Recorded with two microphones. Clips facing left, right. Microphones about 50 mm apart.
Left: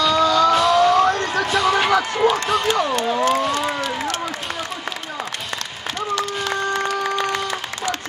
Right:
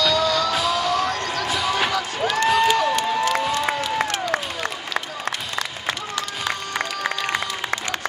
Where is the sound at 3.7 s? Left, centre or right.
Right.